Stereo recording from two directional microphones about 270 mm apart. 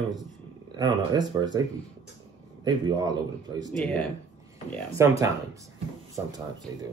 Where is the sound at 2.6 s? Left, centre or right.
Centre.